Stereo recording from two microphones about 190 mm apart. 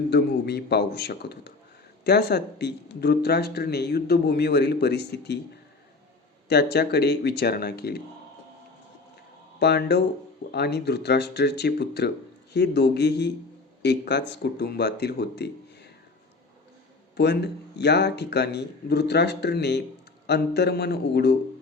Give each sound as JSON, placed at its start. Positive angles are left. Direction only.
{"t": 0.1, "sound": "speech", "side_deg": 60}
{"t": 6.5, "sound": "speech", "side_deg": 60}
{"t": 9.6, "sound": "speech", "side_deg": 60}
{"t": 17.2, "sound": "speech", "side_deg": 60}